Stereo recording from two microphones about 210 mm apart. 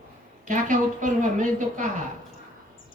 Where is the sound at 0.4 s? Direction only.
40° right (ahead or behind).